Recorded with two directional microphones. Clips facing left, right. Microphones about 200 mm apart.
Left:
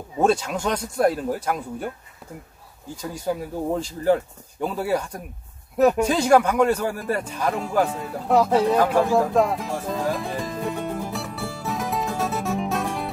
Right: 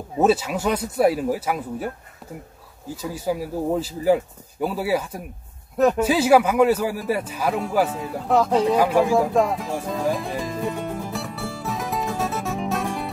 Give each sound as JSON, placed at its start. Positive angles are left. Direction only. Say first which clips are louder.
{"t": 0.2, "sound": "speech", "louder": "right 2 dB", "side_deg": -5}
{"t": 3.0, "sound": "speech", "louder": "right 1 dB", "side_deg": -5}
{"t": 8.7, "sound": "music", "louder": "right 1 dB", "side_deg": -5}